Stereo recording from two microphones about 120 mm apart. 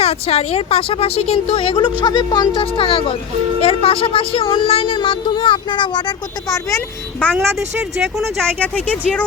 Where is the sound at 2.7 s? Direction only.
50° left (ahead or behind); by 6.8 s 30° left (ahead or behind).